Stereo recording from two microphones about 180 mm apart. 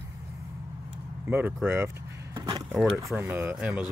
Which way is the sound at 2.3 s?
20° right (ahead or behind).